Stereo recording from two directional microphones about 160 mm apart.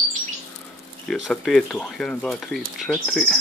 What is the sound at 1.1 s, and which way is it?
Speech, centre (ahead or behind).